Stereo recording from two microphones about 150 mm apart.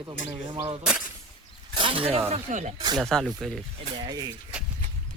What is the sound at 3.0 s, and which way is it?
Speech, centre (ahead or behind).